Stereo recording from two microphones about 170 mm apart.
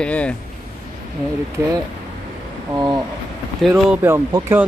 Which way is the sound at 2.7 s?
20° right (ahead or behind).